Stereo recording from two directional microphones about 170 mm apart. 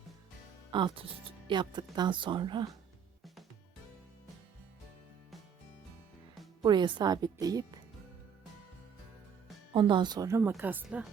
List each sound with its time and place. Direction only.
0.7 s speech: 30° right (ahead or behind)
6.6 s speech: 25° right (ahead or behind)
9.7 s speech: 30° right (ahead or behind); by 11.1 s 5° right (ahead or behind)